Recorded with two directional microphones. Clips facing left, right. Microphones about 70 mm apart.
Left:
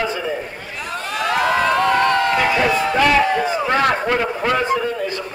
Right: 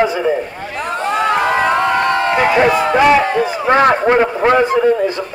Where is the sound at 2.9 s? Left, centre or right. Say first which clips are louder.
Right 4 dB; right.